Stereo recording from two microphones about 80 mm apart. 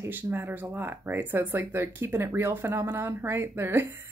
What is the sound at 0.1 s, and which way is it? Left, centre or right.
Speech, right.